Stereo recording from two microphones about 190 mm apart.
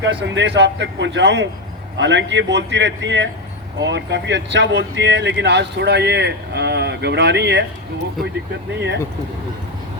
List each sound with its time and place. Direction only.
0.0 s speech: 70° right (ahead or behind)
8.7 s speech: 65° right (ahead or behind)